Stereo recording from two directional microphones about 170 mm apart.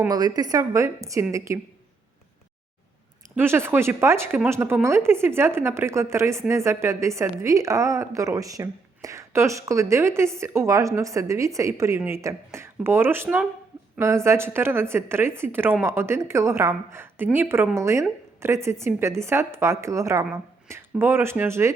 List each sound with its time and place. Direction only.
0.1 s a woman's voice: 25° right (ahead or behind)
3.3 s a woman's voice: 15° right (ahead or behind)